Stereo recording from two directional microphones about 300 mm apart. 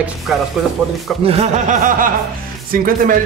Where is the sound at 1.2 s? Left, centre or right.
Right.